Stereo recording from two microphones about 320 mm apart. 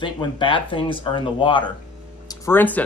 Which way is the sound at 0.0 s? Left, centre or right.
Centre.